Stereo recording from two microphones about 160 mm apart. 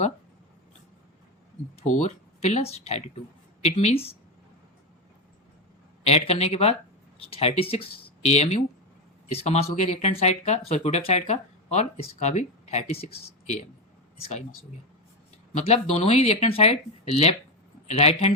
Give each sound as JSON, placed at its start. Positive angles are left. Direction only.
{"t": 2.0, "sound": "speech", "side_deg": 45}
{"t": 6.0, "sound": "speech", "side_deg": 40}
{"t": 15.5, "sound": "speech", "side_deg": 40}